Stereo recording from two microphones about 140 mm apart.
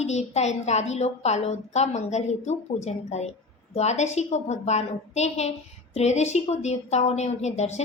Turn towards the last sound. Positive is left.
turn(degrees=55)  # may be behind; listen again after turning